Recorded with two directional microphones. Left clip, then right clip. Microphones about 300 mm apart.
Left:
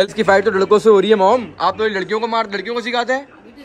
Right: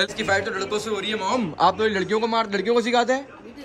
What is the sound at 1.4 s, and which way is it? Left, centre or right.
A man's voice, centre.